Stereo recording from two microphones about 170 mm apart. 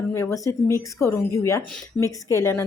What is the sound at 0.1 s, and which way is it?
A woman's voice, 15° left (ahead or behind).